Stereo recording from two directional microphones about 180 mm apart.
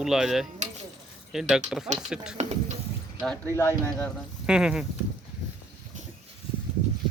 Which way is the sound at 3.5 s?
15° left (ahead or behind).